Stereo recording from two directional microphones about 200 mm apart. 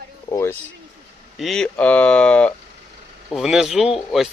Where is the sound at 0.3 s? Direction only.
15° left (ahead or behind).